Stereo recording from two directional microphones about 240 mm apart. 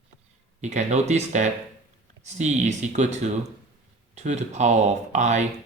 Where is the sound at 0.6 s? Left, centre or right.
Right.